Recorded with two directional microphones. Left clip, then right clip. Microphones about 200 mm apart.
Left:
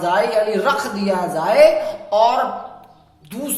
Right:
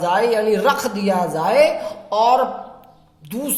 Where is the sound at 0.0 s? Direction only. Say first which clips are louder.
Even; 35° right (ahead or behind).